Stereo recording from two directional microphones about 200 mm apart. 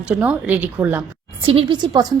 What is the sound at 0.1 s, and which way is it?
Speech, 5° right (ahead or behind).